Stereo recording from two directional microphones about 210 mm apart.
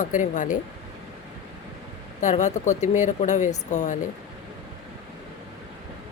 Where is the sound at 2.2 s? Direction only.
35° left (ahead or behind).